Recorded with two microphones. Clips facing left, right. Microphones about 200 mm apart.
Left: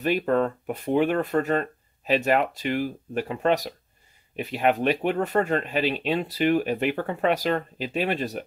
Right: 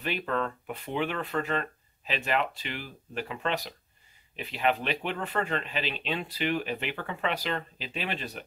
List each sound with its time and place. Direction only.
0.0 s speech: 45° left (ahead or behind)